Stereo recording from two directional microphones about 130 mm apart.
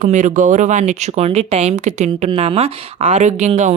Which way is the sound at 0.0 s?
70° right (ahead or behind).